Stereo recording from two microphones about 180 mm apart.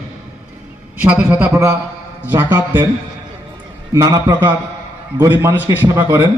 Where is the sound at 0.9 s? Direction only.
10° right (ahead or behind).